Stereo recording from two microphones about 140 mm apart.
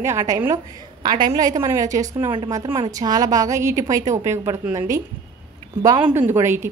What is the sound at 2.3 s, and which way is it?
A woman's voice, 35° right (ahead or behind).